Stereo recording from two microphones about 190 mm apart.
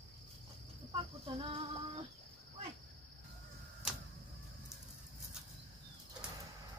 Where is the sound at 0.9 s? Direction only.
30° right (ahead or behind).